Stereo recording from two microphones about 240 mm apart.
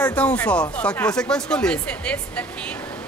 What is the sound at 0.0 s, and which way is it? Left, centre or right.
Speech, centre.